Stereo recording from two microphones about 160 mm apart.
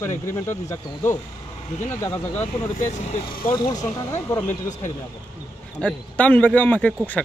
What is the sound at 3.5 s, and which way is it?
A man's voice, 25° left (ahead or behind).